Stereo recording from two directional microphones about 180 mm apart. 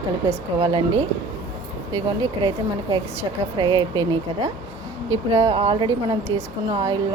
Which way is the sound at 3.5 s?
25° right (ahead or behind).